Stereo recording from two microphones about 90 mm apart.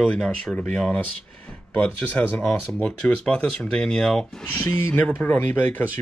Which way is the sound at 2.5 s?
5° left (ahead or behind).